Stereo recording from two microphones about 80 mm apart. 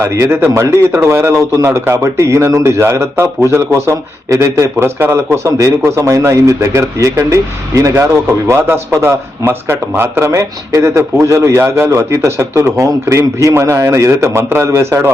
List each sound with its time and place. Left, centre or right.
0.0 s speech: right
5.5 s speech: right